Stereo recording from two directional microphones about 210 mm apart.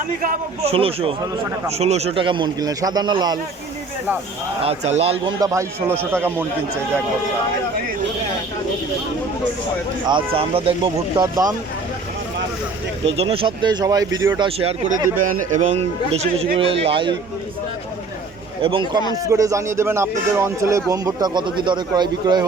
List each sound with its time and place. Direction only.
0.2 s speech: 40° right (ahead or behind)
0.7 s speech: 25° right (ahead or behind)
4.6 s speech: 30° right (ahead or behind); by 6.1 s 15° right (ahead or behind)
10.1 s speech: 25° right (ahead or behind)
13.1 s speech: 25° right (ahead or behind)
18.6 s speech: 25° right (ahead or behind)